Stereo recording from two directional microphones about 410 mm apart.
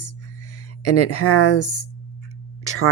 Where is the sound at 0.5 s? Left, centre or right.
Left.